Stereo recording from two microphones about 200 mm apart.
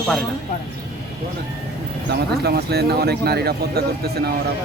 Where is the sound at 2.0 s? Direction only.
55° right (ahead or behind).